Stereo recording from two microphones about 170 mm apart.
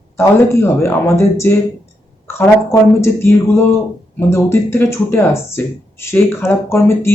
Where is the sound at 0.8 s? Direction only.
15° left (ahead or behind).